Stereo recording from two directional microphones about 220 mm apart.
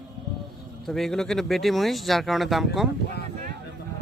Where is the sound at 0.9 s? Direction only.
Centre (ahead or behind).